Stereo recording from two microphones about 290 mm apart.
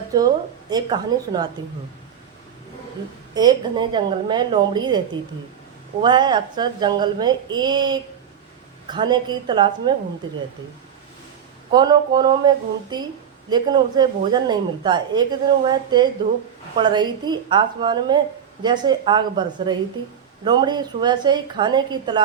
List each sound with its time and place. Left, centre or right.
0.7 s a woman's voice: centre
3.3 s a woman's voice: centre
11.7 s a woman's voice: centre